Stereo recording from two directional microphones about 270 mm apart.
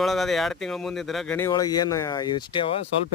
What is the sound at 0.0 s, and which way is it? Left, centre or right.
Speech, centre.